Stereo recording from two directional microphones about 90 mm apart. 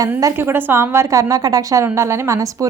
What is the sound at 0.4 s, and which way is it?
A woman's voice, 25° right (ahead or behind).